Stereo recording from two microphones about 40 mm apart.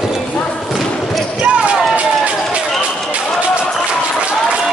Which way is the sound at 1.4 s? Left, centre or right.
Right.